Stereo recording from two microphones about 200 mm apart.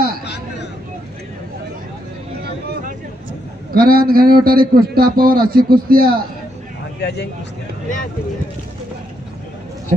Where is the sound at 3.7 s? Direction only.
50° right (ahead or behind).